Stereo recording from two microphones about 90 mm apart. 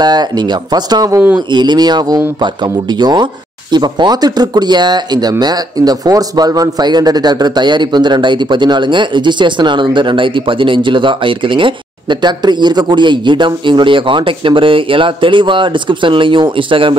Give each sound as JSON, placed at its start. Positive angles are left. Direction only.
{"t": 0.0, "sound": "a man's voice", "side_deg": -50}